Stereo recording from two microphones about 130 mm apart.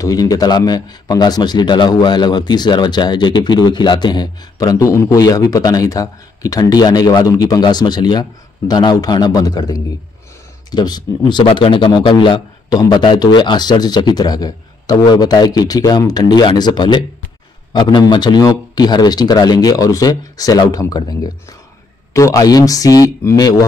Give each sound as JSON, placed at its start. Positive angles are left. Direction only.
{"t": 0.0, "sound": "a man's voice", "side_deg": 30}